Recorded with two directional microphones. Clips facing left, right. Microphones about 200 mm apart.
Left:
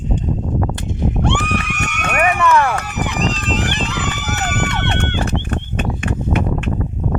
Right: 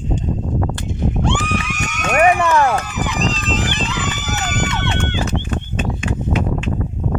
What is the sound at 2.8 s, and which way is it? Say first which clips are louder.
Run: left 1 dB; 65° left (ahead or behind).